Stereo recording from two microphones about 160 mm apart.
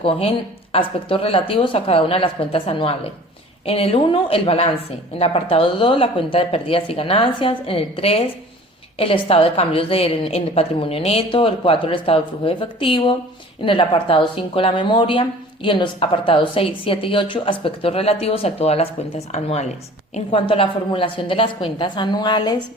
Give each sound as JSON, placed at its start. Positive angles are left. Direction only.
{"t": 0.0, "sound": "a woman's voice", "side_deg": 35}